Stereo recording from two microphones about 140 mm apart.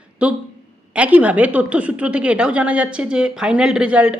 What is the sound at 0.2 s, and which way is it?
Speech, 10° right (ahead or behind).